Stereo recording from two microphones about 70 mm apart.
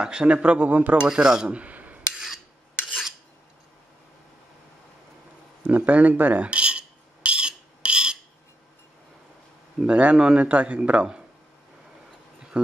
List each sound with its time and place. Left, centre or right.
0.0 s a man's voice: centre
2.1 s filing: centre
5.6 s a sound: right
9.8 s a man's voice: centre
12.6 s a man's voice: centre